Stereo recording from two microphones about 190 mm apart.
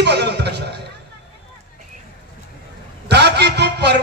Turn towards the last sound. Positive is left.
turn(degrees=-60)  # may be behind; listen again after turning